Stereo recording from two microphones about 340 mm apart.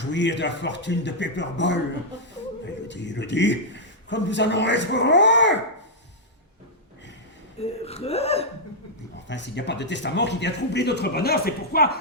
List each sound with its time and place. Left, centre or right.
0.0 s a man's voice: left
2.8 s a man's voice: left
7.6 s speech: centre
9.2 s a man's voice: left